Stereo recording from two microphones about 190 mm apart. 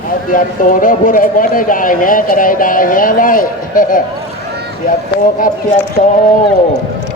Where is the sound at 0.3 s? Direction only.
45° left (ahead or behind).